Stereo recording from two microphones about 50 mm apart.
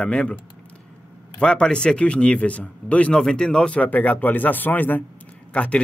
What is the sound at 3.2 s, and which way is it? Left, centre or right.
Speech, centre.